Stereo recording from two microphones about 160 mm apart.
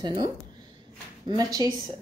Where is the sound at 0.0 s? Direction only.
30° right (ahead or behind).